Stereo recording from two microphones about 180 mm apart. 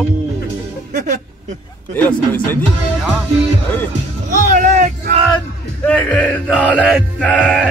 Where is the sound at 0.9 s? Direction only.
45° right (ahead or behind).